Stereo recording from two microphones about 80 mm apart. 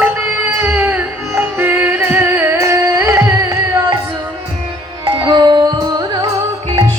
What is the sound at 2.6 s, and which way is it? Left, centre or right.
Music, right.